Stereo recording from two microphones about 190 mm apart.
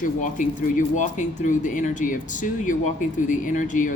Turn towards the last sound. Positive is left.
turn(degrees=40)  # may be behind; listen again after turning